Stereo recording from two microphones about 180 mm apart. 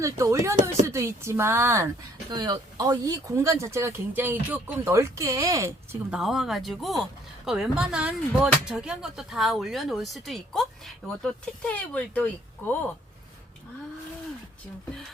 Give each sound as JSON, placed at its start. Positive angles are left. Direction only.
{"t": 0.0, "sound": "speech", "side_deg": -15}
{"t": 6.1, "sound": "speech", "side_deg": 0}